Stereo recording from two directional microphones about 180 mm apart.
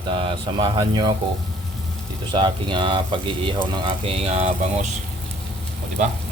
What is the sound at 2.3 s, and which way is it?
Speech, 25° right (ahead or behind).